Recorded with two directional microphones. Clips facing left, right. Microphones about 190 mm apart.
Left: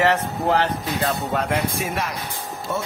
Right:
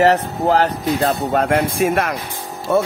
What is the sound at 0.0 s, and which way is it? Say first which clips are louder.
A man's voice: right 5 dB; 40° right (ahead or behind).